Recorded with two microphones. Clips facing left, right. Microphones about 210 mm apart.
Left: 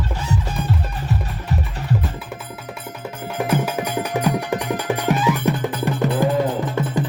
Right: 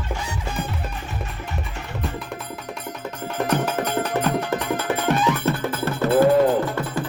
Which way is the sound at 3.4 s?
10° left (ahead or behind).